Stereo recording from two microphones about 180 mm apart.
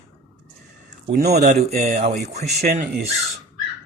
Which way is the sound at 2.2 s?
60° right (ahead or behind).